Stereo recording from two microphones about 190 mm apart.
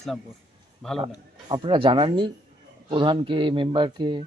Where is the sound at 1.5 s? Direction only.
25° right (ahead or behind).